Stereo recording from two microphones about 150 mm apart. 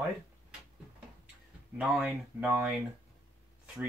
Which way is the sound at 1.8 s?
5° right (ahead or behind).